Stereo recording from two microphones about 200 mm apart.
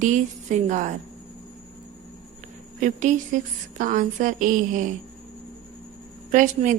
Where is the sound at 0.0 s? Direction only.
40° right (ahead or behind).